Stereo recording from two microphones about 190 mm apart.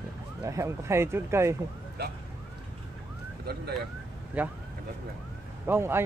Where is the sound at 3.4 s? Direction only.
55° right (ahead or behind).